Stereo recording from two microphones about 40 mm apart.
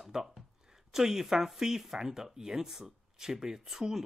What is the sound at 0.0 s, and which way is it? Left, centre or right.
Speech, centre.